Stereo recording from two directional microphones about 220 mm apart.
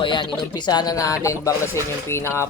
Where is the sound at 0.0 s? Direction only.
20° left (ahead or behind).